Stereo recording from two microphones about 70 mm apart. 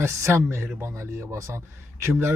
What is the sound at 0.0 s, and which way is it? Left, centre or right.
Speech, right.